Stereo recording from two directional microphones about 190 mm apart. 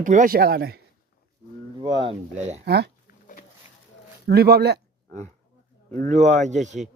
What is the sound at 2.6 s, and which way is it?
Speech, 60° right (ahead or behind).